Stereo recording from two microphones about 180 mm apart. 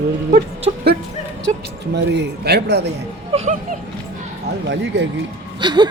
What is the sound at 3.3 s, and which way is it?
Speech, 40° right (ahead or behind).